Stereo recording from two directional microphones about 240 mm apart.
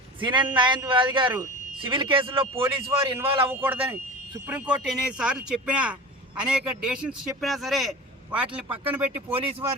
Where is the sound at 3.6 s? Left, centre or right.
Centre.